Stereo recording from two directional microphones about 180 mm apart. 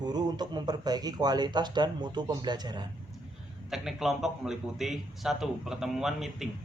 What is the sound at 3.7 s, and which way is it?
A man's voice, centre (ahead or behind).